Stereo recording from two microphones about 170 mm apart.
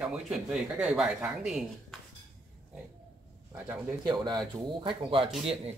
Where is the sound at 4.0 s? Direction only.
25° right (ahead or behind).